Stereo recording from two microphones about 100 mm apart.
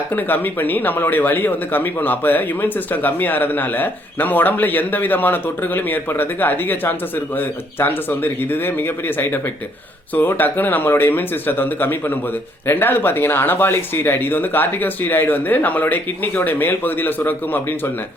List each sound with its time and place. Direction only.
0.1 s speech: 20° left (ahead or behind)